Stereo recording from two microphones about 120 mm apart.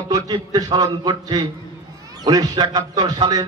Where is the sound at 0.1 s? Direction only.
30° right (ahead or behind).